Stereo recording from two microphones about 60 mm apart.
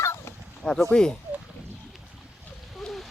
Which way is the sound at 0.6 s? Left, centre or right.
Centre.